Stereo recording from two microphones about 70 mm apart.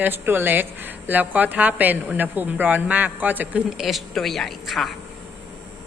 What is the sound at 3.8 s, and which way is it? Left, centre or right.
A woman's voice, centre.